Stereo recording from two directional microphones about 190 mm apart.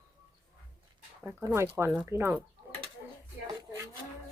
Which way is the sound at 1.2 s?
10° right (ahead or behind).